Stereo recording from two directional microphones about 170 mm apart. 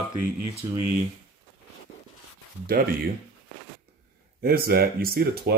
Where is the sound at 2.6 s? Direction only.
55° right (ahead or behind).